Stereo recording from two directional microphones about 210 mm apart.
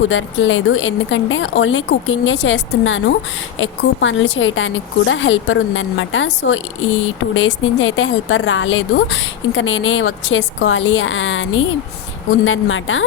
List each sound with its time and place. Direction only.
0.1 s a woman's voice: 65° left (ahead or behind)